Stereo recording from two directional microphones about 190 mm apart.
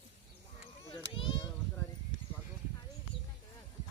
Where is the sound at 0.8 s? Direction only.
25° left (ahead or behind).